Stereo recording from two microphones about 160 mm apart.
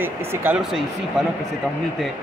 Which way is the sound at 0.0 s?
15° right (ahead or behind).